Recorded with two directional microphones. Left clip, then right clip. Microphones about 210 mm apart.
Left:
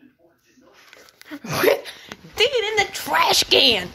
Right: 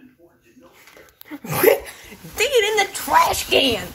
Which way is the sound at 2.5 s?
15° right (ahead or behind).